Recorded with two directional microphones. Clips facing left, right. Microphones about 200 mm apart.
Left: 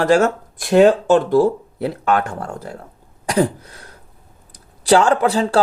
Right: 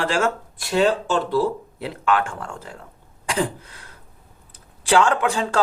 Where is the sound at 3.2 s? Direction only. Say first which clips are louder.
Left 6 dB; 40° left (ahead or behind).